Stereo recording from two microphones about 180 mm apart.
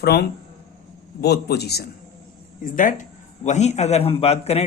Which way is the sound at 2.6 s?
50° left (ahead or behind).